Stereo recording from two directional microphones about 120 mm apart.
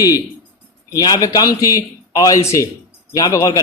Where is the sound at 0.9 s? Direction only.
35° left (ahead or behind).